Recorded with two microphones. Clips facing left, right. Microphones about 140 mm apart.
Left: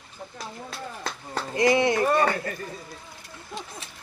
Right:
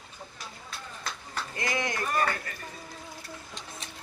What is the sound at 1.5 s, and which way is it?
Speech, 25° left (ahead or behind).